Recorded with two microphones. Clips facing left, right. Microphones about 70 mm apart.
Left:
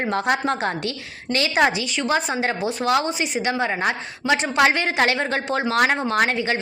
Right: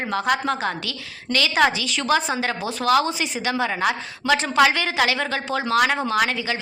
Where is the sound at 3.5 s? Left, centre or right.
Left.